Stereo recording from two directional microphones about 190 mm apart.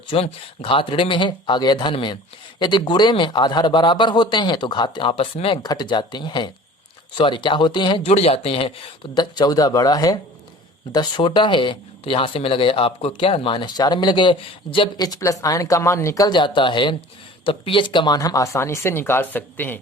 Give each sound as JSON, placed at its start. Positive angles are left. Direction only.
{"t": 0.1, "sound": "speech", "side_deg": 25}